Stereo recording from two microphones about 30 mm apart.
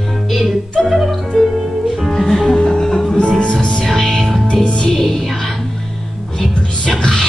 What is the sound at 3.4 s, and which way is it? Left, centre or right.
Music, left.